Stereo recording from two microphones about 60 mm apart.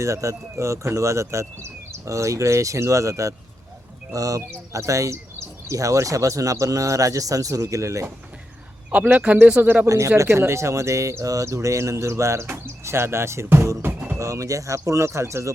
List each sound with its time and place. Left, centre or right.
0.0 s speech: right
4.1 s speech: right
4.5 s speech: right
9.1 s speech: right
9.8 s speech: right
10.2 s speech: right
12.5 s speech: right
13.8 s music: right
14.2 s speech: right